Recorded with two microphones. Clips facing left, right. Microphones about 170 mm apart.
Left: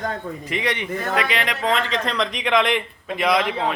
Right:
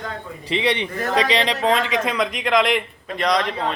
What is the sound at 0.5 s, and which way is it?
A man's voice, 30° right (ahead or behind).